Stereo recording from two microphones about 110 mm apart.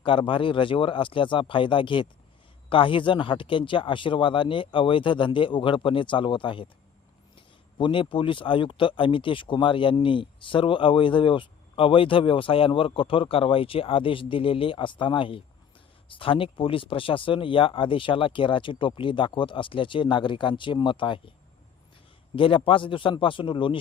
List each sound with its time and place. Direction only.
0.0 s speech: 50° left (ahead or behind)
22.4 s speech: 50° left (ahead or behind)